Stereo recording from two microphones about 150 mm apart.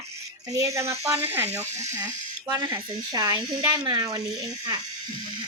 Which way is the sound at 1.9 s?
25° right (ahead or behind).